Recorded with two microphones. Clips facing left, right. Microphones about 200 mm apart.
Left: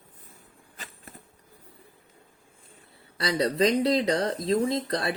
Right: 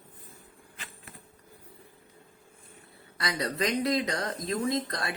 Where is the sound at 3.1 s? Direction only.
30° left (ahead or behind).